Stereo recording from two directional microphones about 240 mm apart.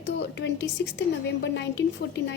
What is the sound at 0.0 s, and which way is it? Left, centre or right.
A woman's voice, left.